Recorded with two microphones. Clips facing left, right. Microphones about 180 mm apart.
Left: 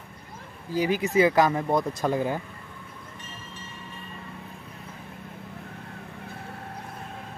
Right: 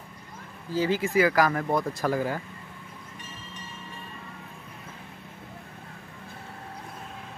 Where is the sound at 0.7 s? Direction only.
15° left (ahead or behind).